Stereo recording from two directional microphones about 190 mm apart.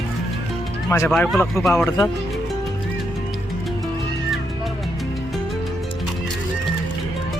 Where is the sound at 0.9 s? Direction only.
10° left (ahead or behind).